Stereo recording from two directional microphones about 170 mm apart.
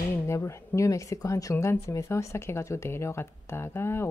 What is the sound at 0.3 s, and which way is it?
Speech, 15° left (ahead or behind).